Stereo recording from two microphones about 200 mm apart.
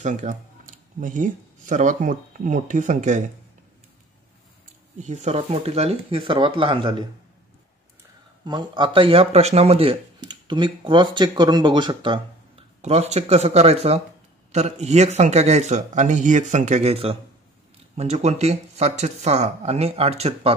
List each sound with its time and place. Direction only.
0.0 s speech: 40° right (ahead or behind)
4.9 s speech: 35° right (ahead or behind)
8.5 s speech: 25° right (ahead or behind)